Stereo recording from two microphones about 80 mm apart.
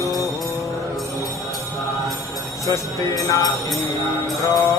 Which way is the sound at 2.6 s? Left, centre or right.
Left.